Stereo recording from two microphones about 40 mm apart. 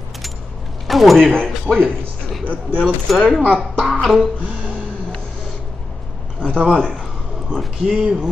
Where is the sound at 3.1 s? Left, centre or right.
Centre.